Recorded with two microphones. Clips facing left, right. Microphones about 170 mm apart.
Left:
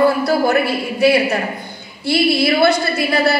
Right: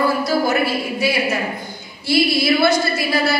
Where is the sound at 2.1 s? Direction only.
60° left (ahead or behind).